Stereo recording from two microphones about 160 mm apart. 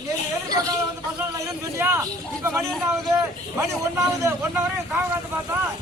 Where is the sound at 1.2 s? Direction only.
20° right (ahead or behind).